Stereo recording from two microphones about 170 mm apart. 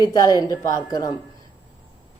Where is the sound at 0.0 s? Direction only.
20° left (ahead or behind).